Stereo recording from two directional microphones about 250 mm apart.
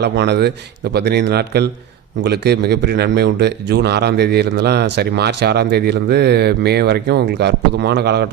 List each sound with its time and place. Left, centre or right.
0.0 s a man's voice: right